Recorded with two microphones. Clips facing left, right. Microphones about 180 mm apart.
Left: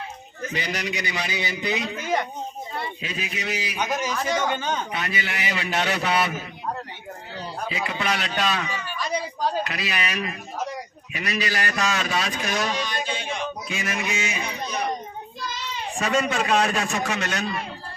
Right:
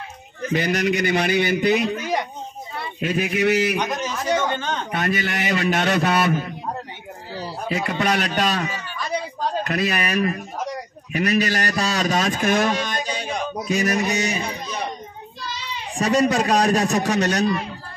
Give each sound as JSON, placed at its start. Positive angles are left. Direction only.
{"t": 0.5, "sound": "a man's voice", "side_deg": -50}
{"t": 2.0, "sound": "a sound", "side_deg": -10}
{"t": 3.0, "sound": "a man's voice", "side_deg": -55}
{"t": 4.4, "sound": "speech", "side_deg": 10}
{"t": 4.9, "sound": "a man's voice", "side_deg": -50}
{"t": 7.6, "sound": "a man's voice", "side_deg": -50}
{"t": 16.0, "sound": "a man's voice", "side_deg": -35}